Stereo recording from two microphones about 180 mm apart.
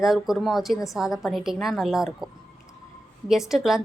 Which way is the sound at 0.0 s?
Centre (ahead or behind).